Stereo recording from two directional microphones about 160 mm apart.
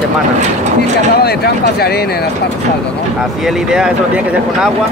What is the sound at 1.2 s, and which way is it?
Speech, 80° left.